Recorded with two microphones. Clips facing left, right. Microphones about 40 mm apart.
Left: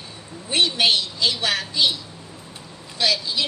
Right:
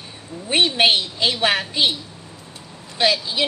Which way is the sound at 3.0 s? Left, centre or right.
Right.